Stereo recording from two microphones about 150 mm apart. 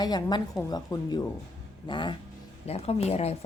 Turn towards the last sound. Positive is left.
turn(degrees=45)  # may be behind; listen again after turning